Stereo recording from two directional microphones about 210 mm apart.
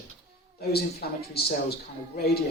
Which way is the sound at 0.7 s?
50° left (ahead or behind).